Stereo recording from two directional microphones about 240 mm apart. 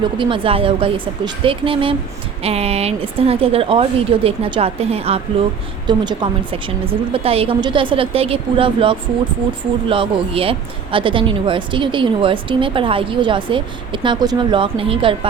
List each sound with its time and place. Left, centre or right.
0.2 s speech: right